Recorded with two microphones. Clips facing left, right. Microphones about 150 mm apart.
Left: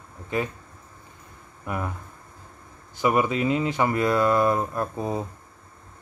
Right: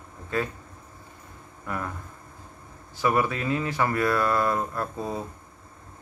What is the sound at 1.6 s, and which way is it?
Speech, 15° left (ahead or behind).